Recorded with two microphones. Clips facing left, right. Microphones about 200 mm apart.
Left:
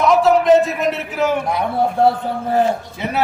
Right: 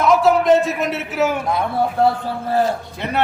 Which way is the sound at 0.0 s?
Centre (ahead or behind).